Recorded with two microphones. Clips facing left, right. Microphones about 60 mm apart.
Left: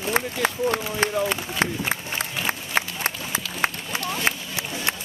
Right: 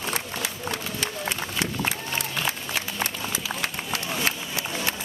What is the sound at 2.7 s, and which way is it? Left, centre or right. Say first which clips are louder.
Run: left 4 dB; left.